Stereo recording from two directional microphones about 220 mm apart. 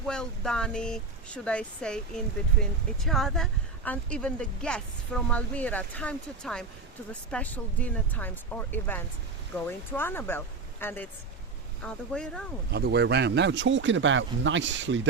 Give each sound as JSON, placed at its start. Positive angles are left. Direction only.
{"t": 0.1, "sound": "speech", "side_deg": 5}
{"t": 12.7, "sound": "speech", "side_deg": -50}